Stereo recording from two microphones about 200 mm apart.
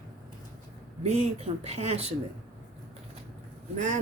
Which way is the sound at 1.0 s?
30° right (ahead or behind).